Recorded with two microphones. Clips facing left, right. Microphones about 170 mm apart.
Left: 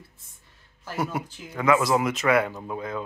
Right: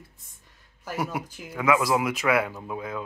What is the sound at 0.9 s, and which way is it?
Speech, 10° right (ahead or behind).